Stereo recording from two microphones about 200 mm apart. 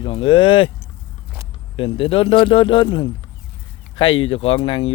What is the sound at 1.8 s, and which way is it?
Speech, 25° left (ahead or behind).